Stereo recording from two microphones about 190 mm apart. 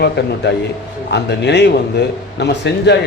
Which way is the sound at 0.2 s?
60° left (ahead or behind).